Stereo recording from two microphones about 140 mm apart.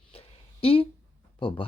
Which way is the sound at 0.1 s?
45° left (ahead or behind).